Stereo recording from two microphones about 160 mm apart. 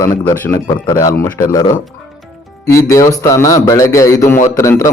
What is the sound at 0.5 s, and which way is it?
A man's voice, 25° left (ahead or behind).